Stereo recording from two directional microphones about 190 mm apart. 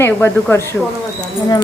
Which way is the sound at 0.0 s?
10° left (ahead or behind).